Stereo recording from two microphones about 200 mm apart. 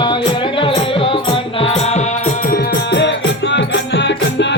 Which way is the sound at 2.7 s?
60° left (ahead or behind).